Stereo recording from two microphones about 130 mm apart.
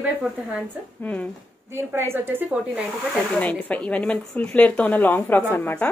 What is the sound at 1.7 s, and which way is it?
Speech, 20° right (ahead or behind).